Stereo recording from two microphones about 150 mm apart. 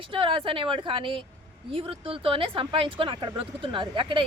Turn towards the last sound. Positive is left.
turn(degrees=-35)  # may be behind; listen again after turning